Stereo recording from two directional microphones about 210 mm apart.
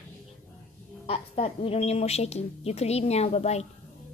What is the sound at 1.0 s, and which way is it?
Speech, 30° left (ahead or behind).